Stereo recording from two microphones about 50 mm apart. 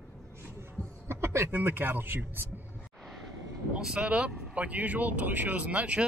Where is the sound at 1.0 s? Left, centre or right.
Right.